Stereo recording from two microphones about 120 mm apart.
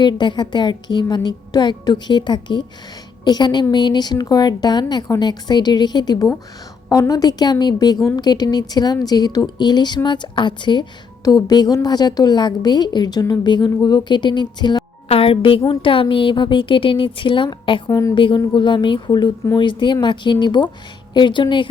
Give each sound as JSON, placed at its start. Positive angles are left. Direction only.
{"t": 0.0, "sound": "speech", "side_deg": 40}
{"t": 15.1, "sound": "a woman's voice", "side_deg": 50}
{"t": 17.8, "sound": "a woman's voice", "side_deg": 30}
{"t": 18.1, "sound": "a woman's voice", "side_deg": 45}